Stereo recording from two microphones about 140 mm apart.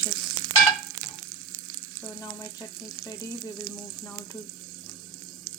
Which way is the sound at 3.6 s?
30° left (ahead or behind).